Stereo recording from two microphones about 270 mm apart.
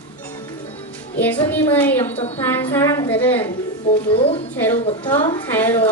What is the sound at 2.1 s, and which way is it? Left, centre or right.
Speech, left.